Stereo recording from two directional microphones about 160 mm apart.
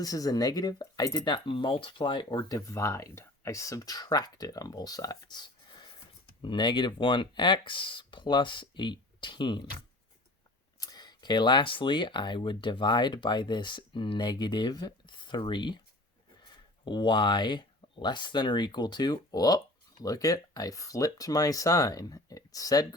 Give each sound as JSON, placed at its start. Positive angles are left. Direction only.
{"t": 0.0, "sound": "speech", "side_deg": 25}
{"t": 10.8, "sound": "speech", "side_deg": 25}